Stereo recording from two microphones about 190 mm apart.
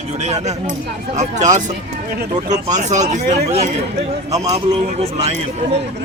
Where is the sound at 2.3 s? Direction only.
20° right (ahead or behind).